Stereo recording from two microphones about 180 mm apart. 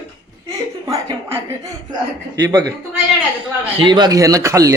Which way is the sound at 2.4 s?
20° right (ahead or behind).